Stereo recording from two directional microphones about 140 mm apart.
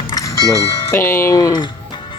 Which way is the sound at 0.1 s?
25° left (ahead or behind).